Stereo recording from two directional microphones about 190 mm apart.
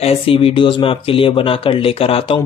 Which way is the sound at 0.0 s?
30° left (ahead or behind).